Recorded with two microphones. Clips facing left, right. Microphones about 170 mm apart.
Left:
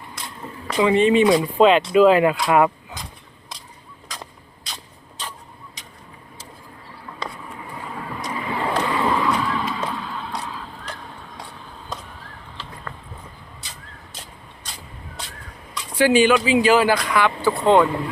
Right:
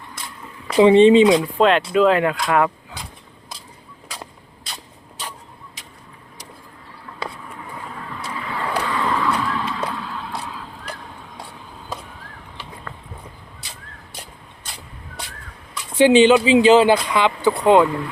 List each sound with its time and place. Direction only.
0.8 s speech: 30° right (ahead or behind)
1.3 s speech: centre (ahead or behind)
4.1 s a sound: 5° right (ahead or behind)
7.2 s a sound: 5° right (ahead or behind)
8.4 s vehicle: 20° left (ahead or behind)
8.8 s skateboard: 15° left (ahead or behind)
9.6 s horse: 5° left (ahead or behind)
9.9 s vehicle: centre (ahead or behind)
16.0 s speech: 25° right (ahead or behind)